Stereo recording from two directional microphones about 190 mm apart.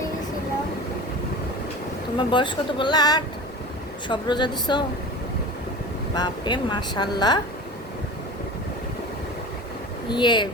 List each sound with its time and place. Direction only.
2.1 s speech: 25° left (ahead or behind)
6.1 s speech: 20° left (ahead or behind)
10.1 s speech: 25° left (ahead or behind)